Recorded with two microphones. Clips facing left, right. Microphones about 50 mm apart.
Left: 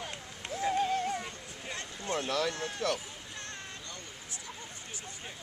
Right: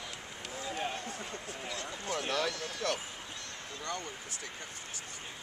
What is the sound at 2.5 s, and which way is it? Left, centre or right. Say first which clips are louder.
Speech: left 3 dB; left.